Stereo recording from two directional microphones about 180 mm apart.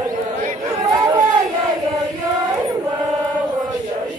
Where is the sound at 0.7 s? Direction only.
20° right (ahead or behind).